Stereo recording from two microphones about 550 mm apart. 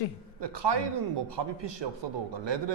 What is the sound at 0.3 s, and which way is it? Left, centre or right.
Speech, right.